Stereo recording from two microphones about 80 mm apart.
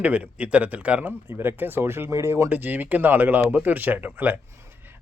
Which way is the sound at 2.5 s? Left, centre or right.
Right.